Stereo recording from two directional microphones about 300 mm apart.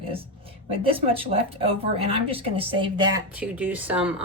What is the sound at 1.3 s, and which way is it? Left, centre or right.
Speech, right.